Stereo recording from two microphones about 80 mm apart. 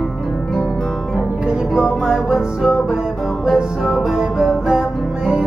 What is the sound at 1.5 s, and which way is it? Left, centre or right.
Music, centre.